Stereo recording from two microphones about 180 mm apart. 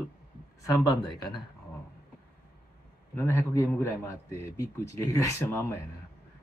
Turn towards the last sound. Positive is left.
turn(degrees=15)  # may be behind; listen again after turning